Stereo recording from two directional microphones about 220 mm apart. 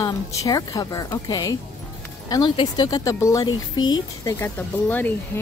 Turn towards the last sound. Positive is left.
turn(degrees=10)  # may be behind; listen again after turning